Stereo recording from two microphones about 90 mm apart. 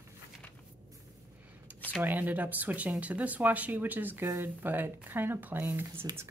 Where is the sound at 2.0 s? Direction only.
20° right (ahead or behind).